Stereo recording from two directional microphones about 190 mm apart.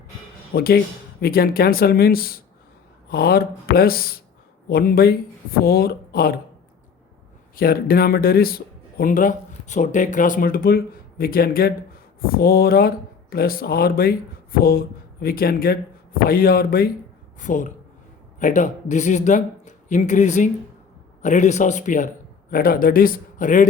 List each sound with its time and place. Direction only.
0.5 s speech: 55° left (ahead or behind)
7.5 s a man's voice: 50° left (ahead or behind)